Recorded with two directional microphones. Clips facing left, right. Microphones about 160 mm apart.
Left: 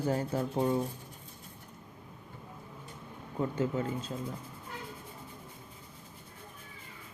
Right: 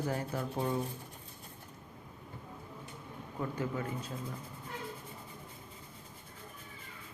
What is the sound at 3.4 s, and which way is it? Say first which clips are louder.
Speech: left 5 dB; 25° left (ahead or behind).